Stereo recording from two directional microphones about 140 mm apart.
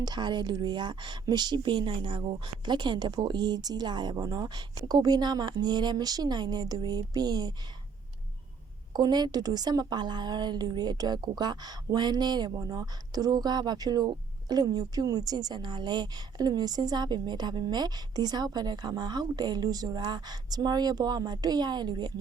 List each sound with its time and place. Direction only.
0.0 s a woman's voice: 30° right (ahead or behind)
8.9 s a woman's voice: 30° right (ahead or behind)